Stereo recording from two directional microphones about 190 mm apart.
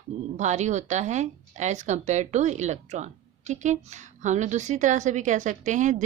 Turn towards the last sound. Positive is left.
turn(degrees=-40)  # may be behind; listen again after turning